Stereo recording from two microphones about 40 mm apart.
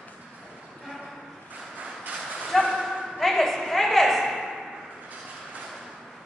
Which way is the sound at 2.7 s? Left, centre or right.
Centre.